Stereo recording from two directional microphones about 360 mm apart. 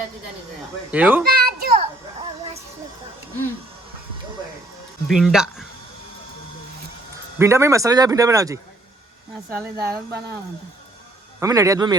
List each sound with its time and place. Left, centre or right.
0.9 s a child's voice: centre
1.2 s children playing: right
5.0 s speech: centre
7.3 s speech: centre
9.6 s speech: centre
11.3 s speech: centre